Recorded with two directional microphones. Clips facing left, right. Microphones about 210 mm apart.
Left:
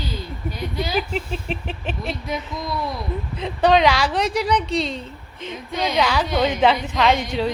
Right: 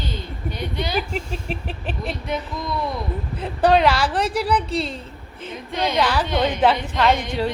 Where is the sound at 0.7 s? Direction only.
5° left (ahead or behind).